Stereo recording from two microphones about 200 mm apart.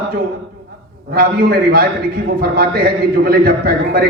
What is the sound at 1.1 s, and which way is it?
A man's voice, 50° right (ahead or behind).